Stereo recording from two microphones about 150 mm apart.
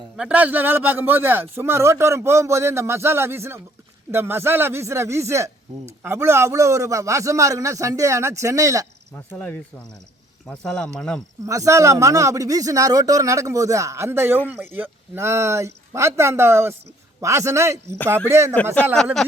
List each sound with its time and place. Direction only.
0.2 s a man's voice: 10° right (ahead or behind)
9.1 s speech: 10° left (ahead or behind)
11.4 s a man's voice: 20° right (ahead or behind)
18.5 s speech: 10° left (ahead or behind)